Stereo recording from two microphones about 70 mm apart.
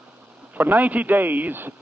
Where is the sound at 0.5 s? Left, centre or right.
Right.